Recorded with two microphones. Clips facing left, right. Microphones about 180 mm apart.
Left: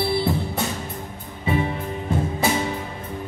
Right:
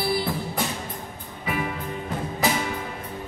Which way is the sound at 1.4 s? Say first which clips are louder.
Left 5 dB; 25° left (ahead or behind).